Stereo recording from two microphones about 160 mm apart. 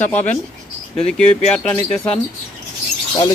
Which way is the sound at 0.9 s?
5° left (ahead or behind).